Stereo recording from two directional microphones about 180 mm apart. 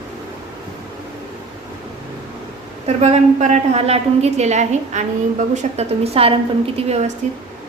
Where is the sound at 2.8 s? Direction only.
35° right (ahead or behind).